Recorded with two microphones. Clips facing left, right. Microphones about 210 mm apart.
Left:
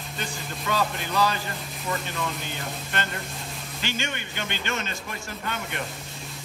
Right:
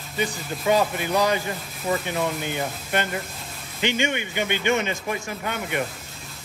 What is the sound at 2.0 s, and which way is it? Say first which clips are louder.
Speech: right 6 dB; 60° right (ahead or behind).